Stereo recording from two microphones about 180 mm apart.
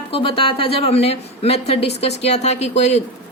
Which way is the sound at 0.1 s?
30° left (ahead or behind).